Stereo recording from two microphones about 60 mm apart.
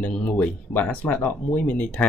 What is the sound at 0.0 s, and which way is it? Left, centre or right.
Speech, centre.